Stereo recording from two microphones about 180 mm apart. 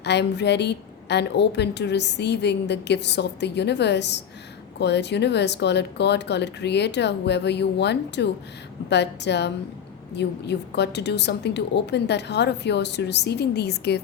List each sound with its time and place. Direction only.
0.0 s a woman's voice: 70° left (ahead or behind)